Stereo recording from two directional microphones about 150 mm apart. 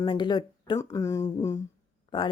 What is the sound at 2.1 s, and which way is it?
Speech, 30° left (ahead or behind).